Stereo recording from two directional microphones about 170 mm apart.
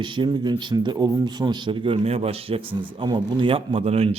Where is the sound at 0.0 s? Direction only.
30° right (ahead or behind).